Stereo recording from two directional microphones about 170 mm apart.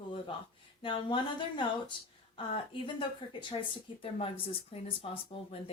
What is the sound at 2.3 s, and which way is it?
Speech, 30° left (ahead or behind).